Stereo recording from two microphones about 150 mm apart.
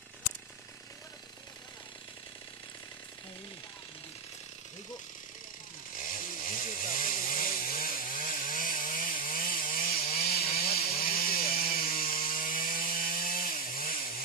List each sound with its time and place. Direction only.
6.0 s chainsaw: 65° left (ahead or behind)
10.2 s chainsaw: 40° left (ahead or behind)
10.8 s chainsaw: 75° left (ahead or behind)